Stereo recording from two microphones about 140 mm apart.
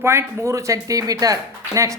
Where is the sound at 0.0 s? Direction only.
20° right (ahead or behind).